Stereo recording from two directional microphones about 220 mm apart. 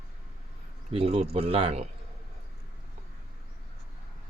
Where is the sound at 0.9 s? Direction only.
25° right (ahead or behind).